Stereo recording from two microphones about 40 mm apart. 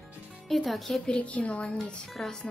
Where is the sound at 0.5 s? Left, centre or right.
Centre.